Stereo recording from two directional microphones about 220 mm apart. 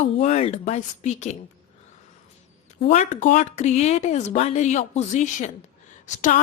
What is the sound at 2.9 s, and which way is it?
Speech, 35° left (ahead or behind).